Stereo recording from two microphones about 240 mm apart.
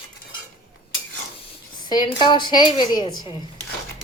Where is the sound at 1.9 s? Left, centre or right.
Centre.